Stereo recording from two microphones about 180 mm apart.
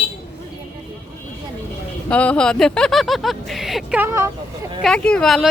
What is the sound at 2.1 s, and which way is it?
Speech, 5° left (ahead or behind).